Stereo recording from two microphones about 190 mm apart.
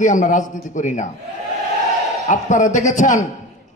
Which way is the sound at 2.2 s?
40° left (ahead or behind).